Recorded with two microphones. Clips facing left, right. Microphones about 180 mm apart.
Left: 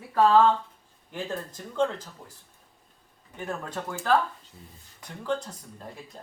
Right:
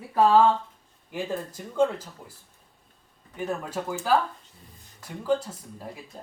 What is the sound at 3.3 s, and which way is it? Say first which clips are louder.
Speech: right 3 dB; 5° right (ahead or behind).